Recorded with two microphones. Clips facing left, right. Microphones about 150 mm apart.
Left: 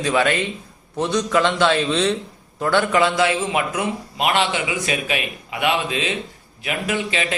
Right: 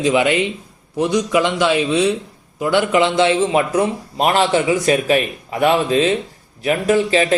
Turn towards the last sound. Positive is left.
turn(degrees=-35)  # may be behind; listen again after turning